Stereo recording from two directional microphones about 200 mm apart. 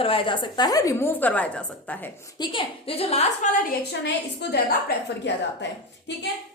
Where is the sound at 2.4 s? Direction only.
25° left (ahead or behind).